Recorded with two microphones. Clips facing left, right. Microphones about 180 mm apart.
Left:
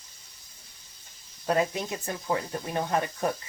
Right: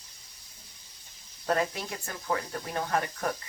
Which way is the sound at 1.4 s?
20° left (ahead or behind).